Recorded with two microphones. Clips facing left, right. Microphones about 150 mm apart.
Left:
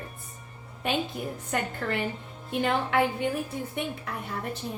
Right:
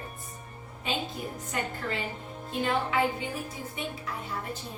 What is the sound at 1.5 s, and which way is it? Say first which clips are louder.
A woman's voice: left 4 dB; 60° left (ahead or behind).